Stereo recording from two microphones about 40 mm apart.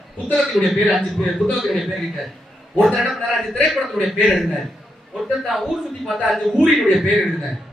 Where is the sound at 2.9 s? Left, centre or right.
Centre.